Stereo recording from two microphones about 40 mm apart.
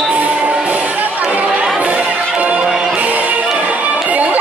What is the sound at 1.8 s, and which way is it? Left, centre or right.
Crowd, right.